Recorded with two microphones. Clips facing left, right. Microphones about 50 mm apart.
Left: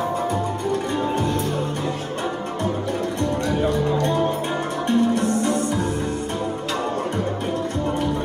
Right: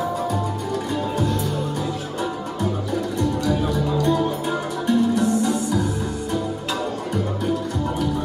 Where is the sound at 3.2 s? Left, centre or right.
Left.